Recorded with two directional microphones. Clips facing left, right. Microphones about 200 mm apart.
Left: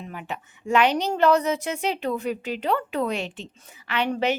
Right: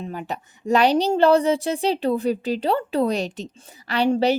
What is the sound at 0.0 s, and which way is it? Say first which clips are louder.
A woman's voice: right 5 dB; 40° right (ahead or behind).